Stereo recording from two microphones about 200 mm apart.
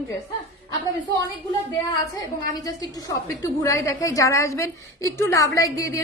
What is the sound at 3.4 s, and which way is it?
A woman's voice, 15° left (ahead or behind).